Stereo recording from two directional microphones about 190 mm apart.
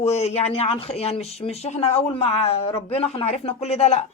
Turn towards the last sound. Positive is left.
turn(degrees=35)  # may be behind; listen again after turning